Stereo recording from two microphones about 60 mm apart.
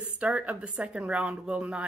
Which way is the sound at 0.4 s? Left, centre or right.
Centre.